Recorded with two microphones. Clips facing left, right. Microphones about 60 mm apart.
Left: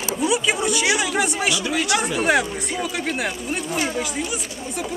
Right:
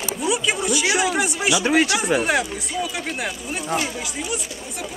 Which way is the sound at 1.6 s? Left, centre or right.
Right.